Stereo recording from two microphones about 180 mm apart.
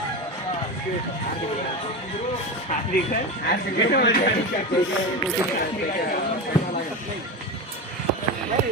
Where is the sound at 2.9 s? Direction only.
55° left (ahead or behind).